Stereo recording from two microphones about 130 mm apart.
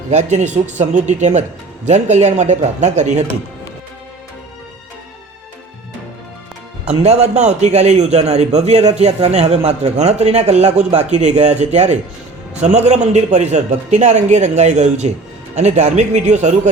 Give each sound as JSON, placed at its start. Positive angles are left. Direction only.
{"t": 0.1, "sound": "a man's voice", "side_deg": -60}
{"t": 6.8, "sound": "a man's voice", "side_deg": -55}